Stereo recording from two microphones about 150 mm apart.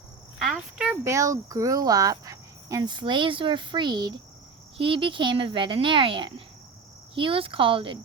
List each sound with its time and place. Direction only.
0.3 s speech: 5° right (ahead or behind)
1.0 s speech: 20° right (ahead or behind); by 7.9 s 35° right (ahead or behind)